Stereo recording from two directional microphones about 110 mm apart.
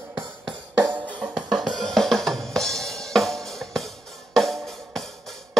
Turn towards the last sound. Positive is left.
turn(degrees=0)  # may be behind; listen again after turning